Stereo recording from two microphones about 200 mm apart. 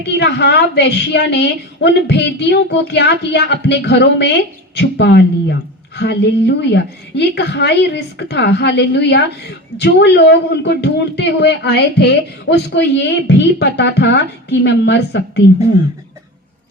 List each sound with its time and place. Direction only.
0.2 s a woman's voice: 60° left (ahead or behind)